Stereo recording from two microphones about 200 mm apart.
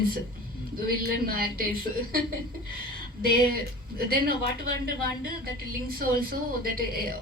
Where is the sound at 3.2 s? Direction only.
50° right (ahead or behind).